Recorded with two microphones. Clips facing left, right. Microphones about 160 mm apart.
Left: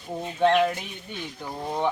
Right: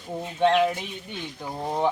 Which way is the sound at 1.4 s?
10° right (ahead or behind).